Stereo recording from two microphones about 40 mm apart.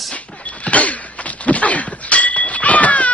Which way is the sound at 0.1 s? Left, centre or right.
Left.